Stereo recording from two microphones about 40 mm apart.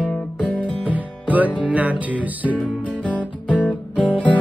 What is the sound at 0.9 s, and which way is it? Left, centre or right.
Music, right.